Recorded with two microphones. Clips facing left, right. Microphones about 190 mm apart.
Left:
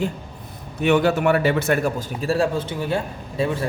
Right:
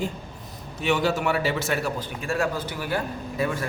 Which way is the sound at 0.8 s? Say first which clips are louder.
Left 6 dB; 55° left (ahead or behind).